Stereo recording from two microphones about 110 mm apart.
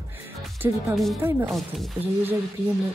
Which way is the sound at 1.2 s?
20° right (ahead or behind).